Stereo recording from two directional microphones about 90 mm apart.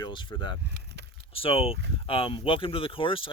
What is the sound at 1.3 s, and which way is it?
Speech, 90° left.